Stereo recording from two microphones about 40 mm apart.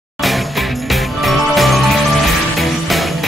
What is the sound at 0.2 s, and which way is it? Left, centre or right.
Music, centre.